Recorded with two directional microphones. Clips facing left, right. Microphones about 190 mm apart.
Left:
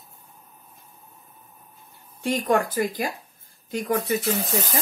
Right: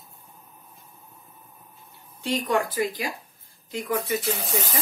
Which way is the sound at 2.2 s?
50° left (ahead or behind).